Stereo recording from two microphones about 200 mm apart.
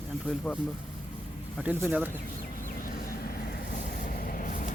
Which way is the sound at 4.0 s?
45° left (ahead or behind).